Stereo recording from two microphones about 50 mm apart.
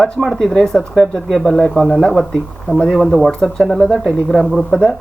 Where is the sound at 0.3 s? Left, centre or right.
Centre.